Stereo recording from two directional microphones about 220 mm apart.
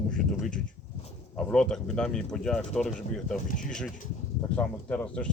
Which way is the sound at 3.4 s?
35° left (ahead or behind).